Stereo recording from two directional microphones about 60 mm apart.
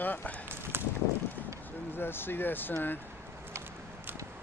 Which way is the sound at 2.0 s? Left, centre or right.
Left.